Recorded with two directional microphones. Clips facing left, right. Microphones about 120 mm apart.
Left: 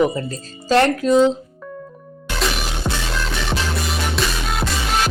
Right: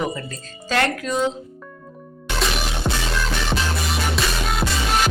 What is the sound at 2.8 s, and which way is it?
Music, centre (ahead or behind).